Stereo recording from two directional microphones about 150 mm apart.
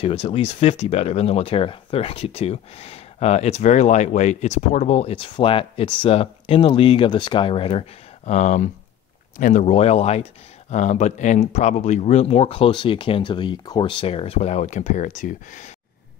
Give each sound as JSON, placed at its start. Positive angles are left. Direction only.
{"t": 0.0, "sound": "speech", "side_deg": 40}
{"t": 8.3, "sound": "speech", "side_deg": 50}